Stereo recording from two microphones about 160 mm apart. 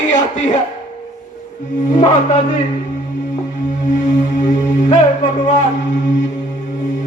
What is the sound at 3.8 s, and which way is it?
Music, 50° left (ahead or behind).